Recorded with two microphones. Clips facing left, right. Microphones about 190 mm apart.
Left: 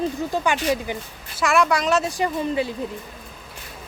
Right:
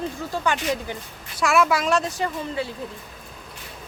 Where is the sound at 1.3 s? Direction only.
Centre (ahead or behind).